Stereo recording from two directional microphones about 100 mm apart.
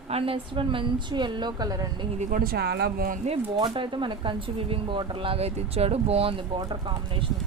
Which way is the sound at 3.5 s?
55° right (ahead or behind).